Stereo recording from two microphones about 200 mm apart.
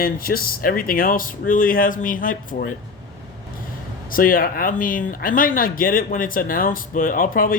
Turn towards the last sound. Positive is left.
turn(degrees=45)  # may be behind; listen again after turning